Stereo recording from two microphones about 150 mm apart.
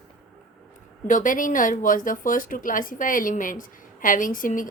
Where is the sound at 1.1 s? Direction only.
60° left (ahead or behind).